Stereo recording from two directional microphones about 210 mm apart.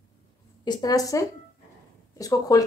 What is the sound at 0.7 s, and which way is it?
A woman's voice, 15° left (ahead or behind).